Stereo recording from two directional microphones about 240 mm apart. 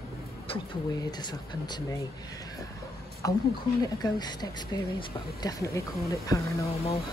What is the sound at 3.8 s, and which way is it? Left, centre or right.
Speech, centre.